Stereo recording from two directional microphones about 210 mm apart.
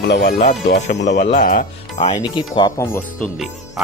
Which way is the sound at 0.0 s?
50° left (ahead or behind).